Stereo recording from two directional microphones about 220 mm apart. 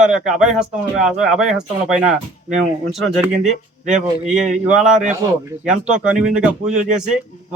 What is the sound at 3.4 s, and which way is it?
Speech, 35° right (ahead or behind).